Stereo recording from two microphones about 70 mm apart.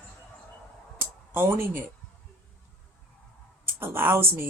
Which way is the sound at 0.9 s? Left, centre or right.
Right.